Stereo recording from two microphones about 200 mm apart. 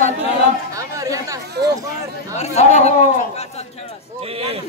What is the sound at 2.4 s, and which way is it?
Speech, 35° left (ahead or behind).